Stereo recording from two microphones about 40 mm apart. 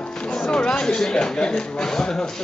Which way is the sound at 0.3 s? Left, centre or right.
Centre.